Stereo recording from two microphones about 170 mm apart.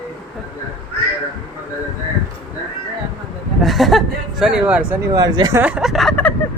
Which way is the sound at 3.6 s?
Centre (ahead or behind).